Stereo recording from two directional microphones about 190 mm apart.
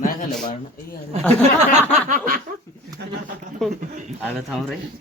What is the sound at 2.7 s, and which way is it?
Speech, 15° left (ahead or behind).